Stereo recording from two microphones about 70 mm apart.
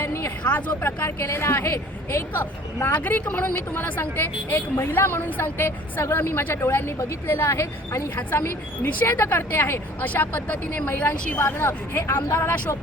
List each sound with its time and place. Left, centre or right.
0.0 s vehicle: left
0.4 s speech: left
1.0 s a woman's voice: left
2.8 s speech: left
10.0 s speech: left